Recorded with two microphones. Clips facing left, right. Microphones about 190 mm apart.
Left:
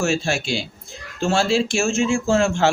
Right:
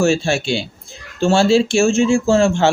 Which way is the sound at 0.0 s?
30° right (ahead or behind).